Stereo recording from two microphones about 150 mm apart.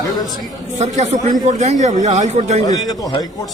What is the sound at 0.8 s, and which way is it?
A man's voice, 55° right (ahead or behind).